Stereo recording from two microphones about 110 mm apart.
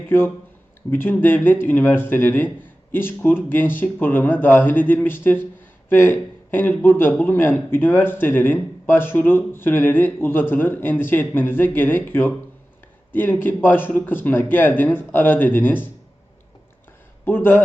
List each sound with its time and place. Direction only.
0.9 s a man's voice: 20° left (ahead or behind)
17.2 s a man's voice: 20° left (ahead or behind)